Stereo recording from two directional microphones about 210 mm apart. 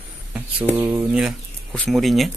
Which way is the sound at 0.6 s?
15° right (ahead or behind).